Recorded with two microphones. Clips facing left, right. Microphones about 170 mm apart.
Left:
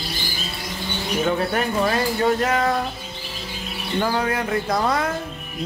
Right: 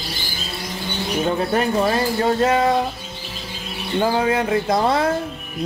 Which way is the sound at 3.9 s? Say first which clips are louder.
Right 4 dB; 25° right (ahead or behind).